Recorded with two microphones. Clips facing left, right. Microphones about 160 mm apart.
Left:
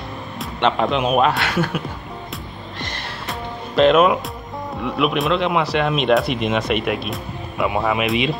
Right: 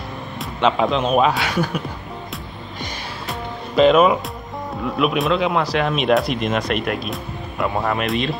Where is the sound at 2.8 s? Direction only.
Centre (ahead or behind).